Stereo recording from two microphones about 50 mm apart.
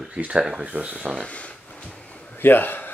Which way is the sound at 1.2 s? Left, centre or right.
Left.